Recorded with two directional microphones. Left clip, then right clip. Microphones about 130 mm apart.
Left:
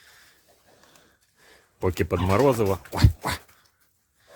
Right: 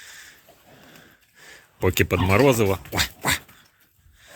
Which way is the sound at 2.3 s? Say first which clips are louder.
Right 1 dB; 30° left (ahead or behind).